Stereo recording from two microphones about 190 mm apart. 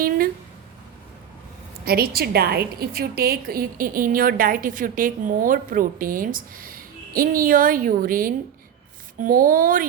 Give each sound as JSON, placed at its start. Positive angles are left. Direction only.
{"t": 1.8, "sound": "a woman's voice", "side_deg": -55}